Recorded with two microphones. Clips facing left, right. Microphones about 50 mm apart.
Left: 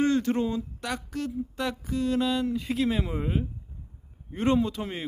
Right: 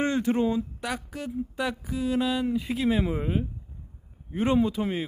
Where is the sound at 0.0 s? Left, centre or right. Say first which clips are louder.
Even; right.